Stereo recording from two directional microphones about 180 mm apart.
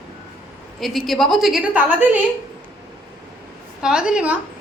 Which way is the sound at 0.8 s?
Centre (ahead or behind).